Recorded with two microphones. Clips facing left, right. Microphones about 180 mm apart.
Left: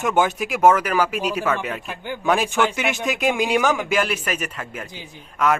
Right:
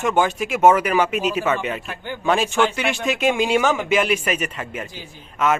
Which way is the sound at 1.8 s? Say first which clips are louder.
Left 1 dB; 10° left (ahead or behind).